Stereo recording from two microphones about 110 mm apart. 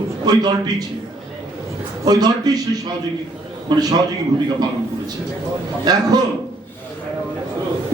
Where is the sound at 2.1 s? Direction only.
40° right (ahead or behind).